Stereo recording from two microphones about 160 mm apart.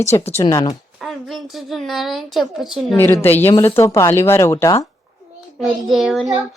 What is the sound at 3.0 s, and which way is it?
Speech, 15° left (ahead or behind).